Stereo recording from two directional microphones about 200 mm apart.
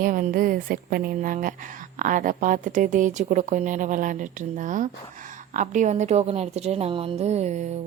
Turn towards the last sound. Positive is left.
turn(degrees=-35)  # may be behind; listen again after turning